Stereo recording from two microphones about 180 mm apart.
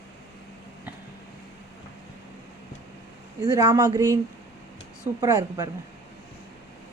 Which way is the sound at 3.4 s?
20° right (ahead or behind).